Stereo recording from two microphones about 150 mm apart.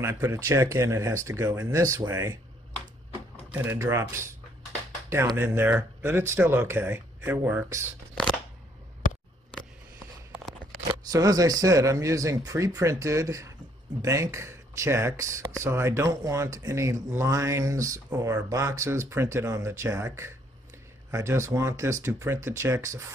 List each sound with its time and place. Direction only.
0.0 s speech: 20° right (ahead or behind)
3.5 s speech: 15° right (ahead or behind)
11.1 s speech: 25° right (ahead or behind)